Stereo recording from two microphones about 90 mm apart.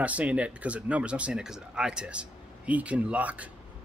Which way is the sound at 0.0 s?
15° right (ahead or behind).